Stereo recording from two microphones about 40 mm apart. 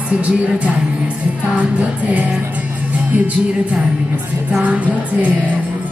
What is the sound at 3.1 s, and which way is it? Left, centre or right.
A woman's voice, right.